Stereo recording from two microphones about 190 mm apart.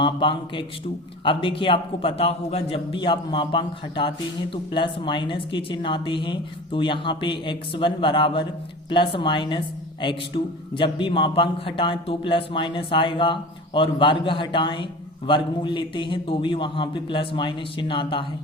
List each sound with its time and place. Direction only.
0.0 s a woman's voice: 25° left (ahead or behind)